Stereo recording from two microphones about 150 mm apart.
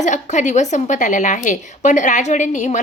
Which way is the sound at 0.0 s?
55° left (ahead or behind).